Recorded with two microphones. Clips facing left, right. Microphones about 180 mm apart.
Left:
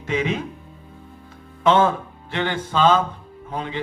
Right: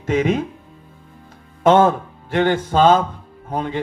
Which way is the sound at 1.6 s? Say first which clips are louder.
Right 4 dB; 45° right (ahead or behind).